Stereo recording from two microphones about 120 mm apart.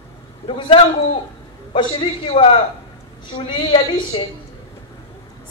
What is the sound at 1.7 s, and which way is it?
Speech, 40° left (ahead or behind).